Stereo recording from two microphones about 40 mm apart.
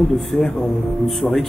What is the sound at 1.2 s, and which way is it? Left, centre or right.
Speech, centre.